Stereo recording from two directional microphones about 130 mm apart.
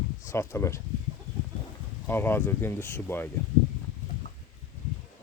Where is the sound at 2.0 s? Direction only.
15° left (ahead or behind).